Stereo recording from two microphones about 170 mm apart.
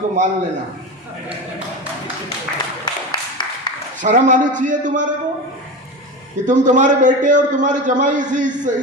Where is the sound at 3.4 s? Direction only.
25° left (ahead or behind).